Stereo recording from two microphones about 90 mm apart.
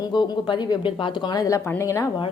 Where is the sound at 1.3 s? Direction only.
40° left (ahead or behind).